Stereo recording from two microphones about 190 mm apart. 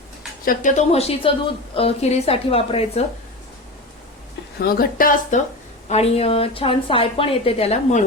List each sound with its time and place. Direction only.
0.4 s a woman's voice: 40° left (ahead or behind)
4.6 s speech: 50° left (ahead or behind)
5.9 s a woman's voice: 35° left (ahead or behind)